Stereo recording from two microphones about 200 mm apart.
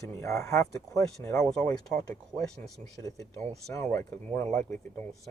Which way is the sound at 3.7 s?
15° left (ahead or behind).